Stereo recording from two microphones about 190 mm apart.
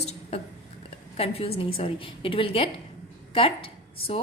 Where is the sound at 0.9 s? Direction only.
30° left (ahead or behind).